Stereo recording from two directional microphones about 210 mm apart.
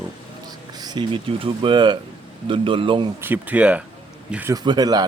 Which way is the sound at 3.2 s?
10° right (ahead or behind).